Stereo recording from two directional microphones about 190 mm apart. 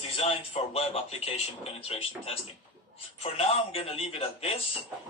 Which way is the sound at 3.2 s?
30° left (ahead or behind).